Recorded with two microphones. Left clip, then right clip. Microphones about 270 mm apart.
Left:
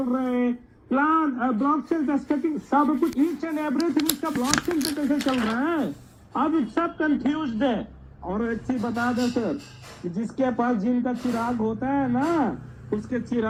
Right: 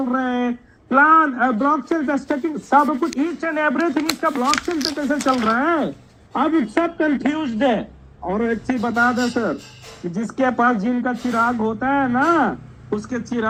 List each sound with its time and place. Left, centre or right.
0.1 s a man's voice: right